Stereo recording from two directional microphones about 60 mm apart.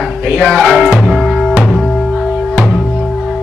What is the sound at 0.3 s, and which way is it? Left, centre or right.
Speech, right.